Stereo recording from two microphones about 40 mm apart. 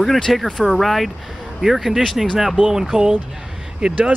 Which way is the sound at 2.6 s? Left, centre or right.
Centre.